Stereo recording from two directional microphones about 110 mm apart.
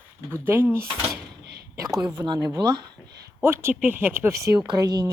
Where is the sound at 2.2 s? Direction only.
40° right (ahead or behind).